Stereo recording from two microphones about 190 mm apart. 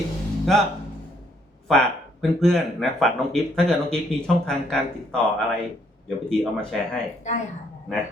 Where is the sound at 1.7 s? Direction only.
Centre (ahead or behind).